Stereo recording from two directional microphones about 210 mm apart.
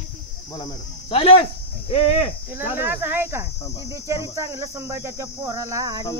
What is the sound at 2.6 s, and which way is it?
Speech, 10° right (ahead or behind).